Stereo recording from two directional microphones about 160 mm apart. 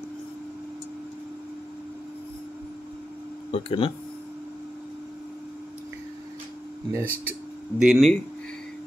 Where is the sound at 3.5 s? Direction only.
35° left (ahead or behind).